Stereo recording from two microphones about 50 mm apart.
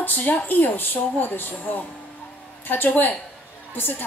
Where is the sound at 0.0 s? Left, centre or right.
Left.